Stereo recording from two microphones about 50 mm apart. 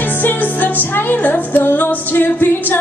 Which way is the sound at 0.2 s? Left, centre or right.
Left.